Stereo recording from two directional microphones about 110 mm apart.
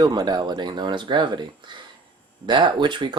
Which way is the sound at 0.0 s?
40° right (ahead or behind).